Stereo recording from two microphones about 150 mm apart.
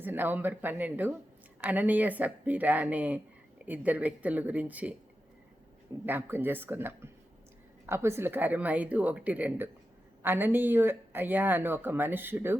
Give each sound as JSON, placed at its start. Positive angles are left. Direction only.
{"t": 0.0, "sound": "speech", "side_deg": -10}
{"t": 6.1, "sound": "speech", "side_deg": -15}